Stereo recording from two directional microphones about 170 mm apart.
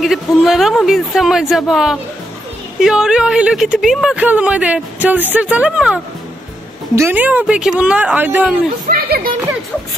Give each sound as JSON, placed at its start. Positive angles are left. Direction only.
{"t": 0.0, "sound": "speech", "side_deg": 0}
{"t": 7.0, "sound": "a woman's voice", "side_deg": -10}
{"t": 8.8, "sound": "speech", "side_deg": -60}